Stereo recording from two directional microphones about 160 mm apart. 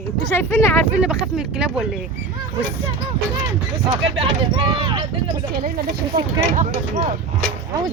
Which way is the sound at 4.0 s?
35° right (ahead or behind).